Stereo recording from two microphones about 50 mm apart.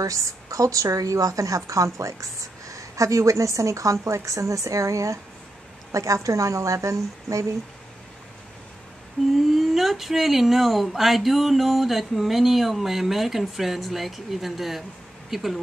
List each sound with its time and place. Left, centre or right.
0.1 s a woman's voice: right
9.3 s speech: centre